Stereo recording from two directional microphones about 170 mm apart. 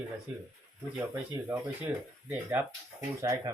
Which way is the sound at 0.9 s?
15° right (ahead or behind).